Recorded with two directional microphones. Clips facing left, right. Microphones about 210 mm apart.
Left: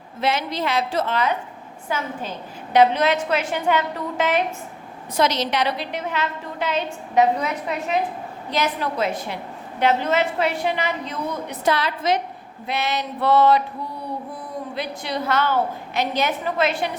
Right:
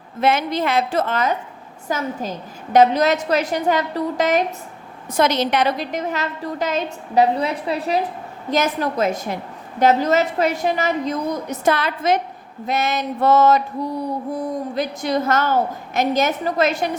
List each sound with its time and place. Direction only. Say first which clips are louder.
0.2 s a woman's voice: right 4 dB; 50° right (ahead or behind)
5.1 s a woman's voice: right 3 dB; 55° right (ahead or behind); by 8.0 s 35° right (ahead or behind)
8.4 s a woman's voice: right 4 dB; 45° right (ahead or behind)